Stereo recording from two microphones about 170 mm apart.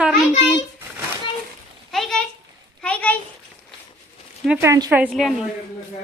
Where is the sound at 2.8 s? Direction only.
5° left (ahead or behind).